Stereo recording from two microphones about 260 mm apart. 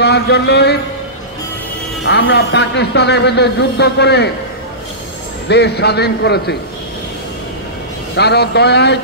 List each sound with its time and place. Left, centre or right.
0.0 s a sound: left
2.0 s a man's voice: left
5.5 s a man's voice: left
8.2 s a man's voice: left